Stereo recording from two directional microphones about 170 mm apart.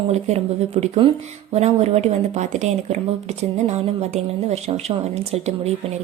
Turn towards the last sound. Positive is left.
turn(degrees=-40)  # may be behind; listen again after turning